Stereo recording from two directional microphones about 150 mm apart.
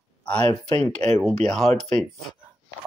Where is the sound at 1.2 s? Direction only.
5° left (ahead or behind).